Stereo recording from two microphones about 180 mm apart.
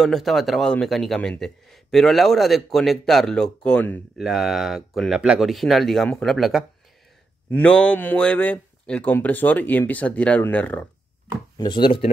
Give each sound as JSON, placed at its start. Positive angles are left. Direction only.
{"t": 0.0, "sound": "speech", "side_deg": 0}
{"t": 11.5, "sound": "speech", "side_deg": 25}